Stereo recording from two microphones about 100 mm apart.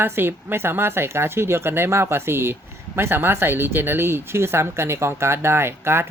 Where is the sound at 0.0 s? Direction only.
20° right (ahead or behind).